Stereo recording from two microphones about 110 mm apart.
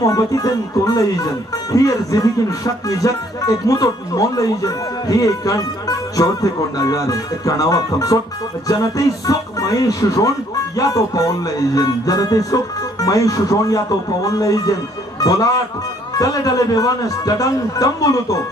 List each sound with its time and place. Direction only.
0.0 s speech: 30° left (ahead or behind)